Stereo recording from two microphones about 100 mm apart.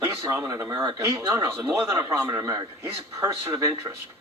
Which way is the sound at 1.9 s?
40° right (ahead or behind).